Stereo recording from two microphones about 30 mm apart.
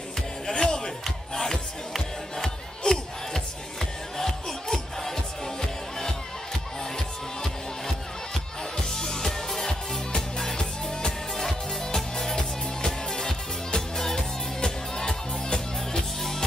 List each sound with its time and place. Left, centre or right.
0.5 s a sound: left
1.3 s music: centre
8.7 s music: centre
16.2 s music: centre